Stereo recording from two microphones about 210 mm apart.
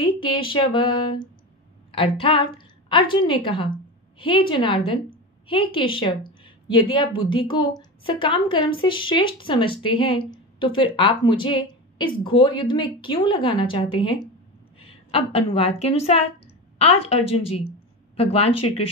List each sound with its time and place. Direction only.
0.0 s a woman's voice: 25° left (ahead or behind)